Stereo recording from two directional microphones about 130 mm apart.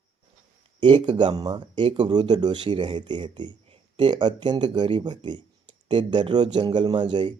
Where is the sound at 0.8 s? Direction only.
40° right (ahead or behind).